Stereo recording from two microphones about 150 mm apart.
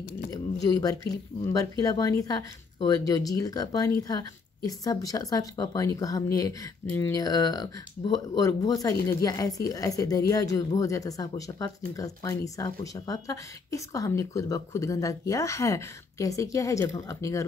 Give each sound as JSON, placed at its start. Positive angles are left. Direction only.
{"t": 0.3, "sound": "speech", "side_deg": 25}